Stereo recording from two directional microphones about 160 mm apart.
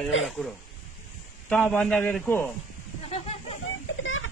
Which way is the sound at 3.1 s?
40° left (ahead or behind).